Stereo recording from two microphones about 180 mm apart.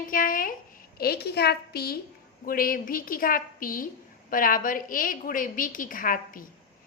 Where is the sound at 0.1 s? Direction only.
50° left (ahead or behind).